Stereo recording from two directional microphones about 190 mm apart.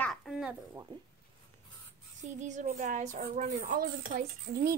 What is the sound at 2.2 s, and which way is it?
A woman's voice, 40° right (ahead or behind).